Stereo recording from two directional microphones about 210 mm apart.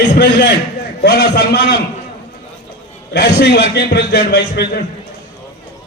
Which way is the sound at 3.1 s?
50° left (ahead or behind).